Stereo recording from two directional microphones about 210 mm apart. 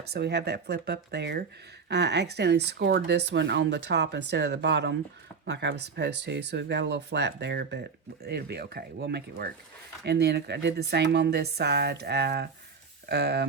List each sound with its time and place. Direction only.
0.1 s speech: 50° right (ahead or behind)